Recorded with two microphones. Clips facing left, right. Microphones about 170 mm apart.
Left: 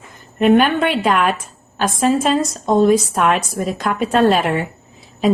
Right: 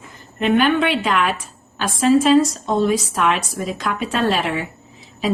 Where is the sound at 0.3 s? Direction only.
50° left (ahead or behind).